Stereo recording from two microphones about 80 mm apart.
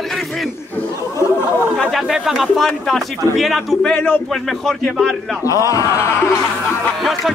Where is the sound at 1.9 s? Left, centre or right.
Centre.